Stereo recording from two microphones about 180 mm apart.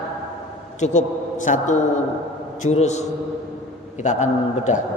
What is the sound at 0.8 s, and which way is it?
A man's voice, 40° left (ahead or behind).